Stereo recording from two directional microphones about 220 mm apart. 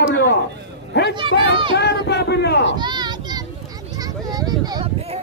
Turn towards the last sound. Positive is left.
turn(degrees=-20)  # may be behind; listen again after turning